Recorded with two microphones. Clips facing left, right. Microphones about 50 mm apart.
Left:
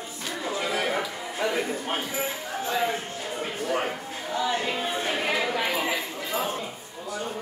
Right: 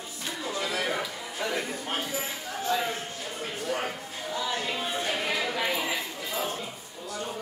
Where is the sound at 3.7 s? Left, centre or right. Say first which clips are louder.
Left 3 dB; centre.